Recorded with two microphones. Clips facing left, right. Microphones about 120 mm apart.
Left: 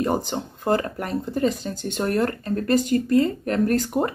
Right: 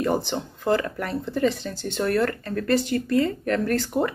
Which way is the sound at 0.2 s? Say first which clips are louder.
Even; 40° left (ahead or behind).